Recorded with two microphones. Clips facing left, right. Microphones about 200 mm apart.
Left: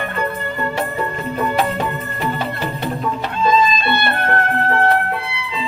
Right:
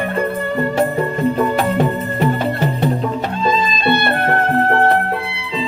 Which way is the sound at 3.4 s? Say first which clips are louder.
Left 3 dB; 35° right (ahead or behind).